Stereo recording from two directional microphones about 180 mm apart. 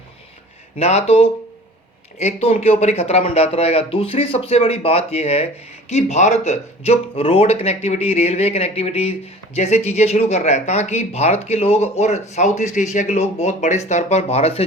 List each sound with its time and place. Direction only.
0.8 s speech: 35° left (ahead or behind)